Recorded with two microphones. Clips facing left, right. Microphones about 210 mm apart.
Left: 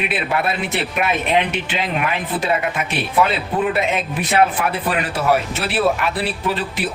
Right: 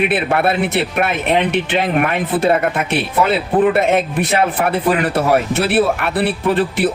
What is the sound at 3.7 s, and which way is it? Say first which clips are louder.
Speech: right 6 dB; 55° right (ahead or behind).